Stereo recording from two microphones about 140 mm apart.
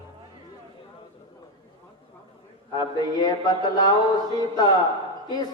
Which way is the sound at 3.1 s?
30° left (ahead or behind).